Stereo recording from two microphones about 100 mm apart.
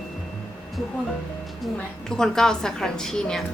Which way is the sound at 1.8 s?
5° left (ahead or behind).